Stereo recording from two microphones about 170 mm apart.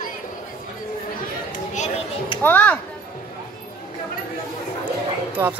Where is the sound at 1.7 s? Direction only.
40° left (ahead or behind).